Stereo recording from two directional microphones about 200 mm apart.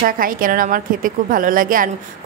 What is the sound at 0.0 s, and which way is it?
A woman's voice, 45° right (ahead or behind).